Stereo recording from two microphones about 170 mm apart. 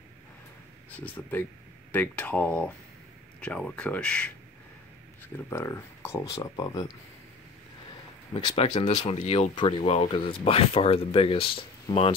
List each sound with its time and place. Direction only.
0.8 s speech: 10° left (ahead or behind)
5.5 s speech: 15° left (ahead or behind)
8.3 s speech: 30° left (ahead or behind)
8.7 s speech: 45° left (ahead or behind)